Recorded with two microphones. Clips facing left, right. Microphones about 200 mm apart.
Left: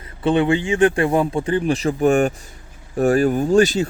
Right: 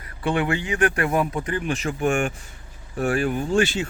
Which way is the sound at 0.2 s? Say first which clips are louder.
Left 6 dB; 25° left (ahead or behind).